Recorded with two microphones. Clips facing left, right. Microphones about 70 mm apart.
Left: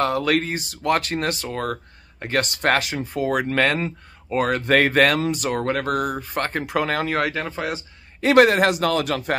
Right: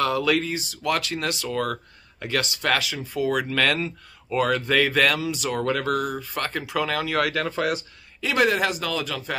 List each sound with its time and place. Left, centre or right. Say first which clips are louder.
0.0 s speech: left 2 dB; left
8.2 s speech: left 7 dB; left